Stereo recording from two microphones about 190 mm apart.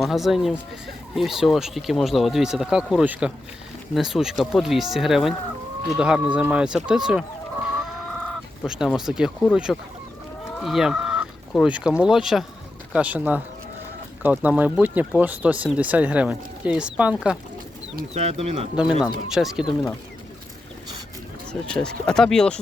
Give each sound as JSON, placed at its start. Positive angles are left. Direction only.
{"t": 0.0, "sound": "speech", "side_deg": 0}
{"t": 8.2, "sound": "speech", "side_deg": 0}
{"t": 18.1, "sound": "speech", "side_deg": -30}
{"t": 18.8, "sound": "speech", "side_deg": -5}
{"t": 21.7, "sound": "speech", "side_deg": 5}